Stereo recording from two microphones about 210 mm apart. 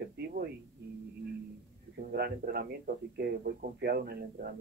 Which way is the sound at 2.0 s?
50° right (ahead or behind).